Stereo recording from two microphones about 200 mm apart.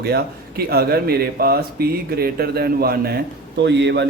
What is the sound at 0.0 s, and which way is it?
Speech, 55° right (ahead or behind).